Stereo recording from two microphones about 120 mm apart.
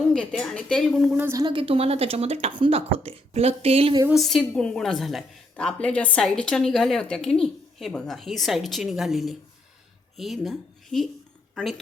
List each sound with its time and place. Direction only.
0.1 s a woman's voice: 5° left (ahead or behind)
1.3 s a woman's voice: 30° right (ahead or behind)
1.5 s speech: 50° right (ahead or behind)
4.1 s a woman's voice: centre (ahead or behind)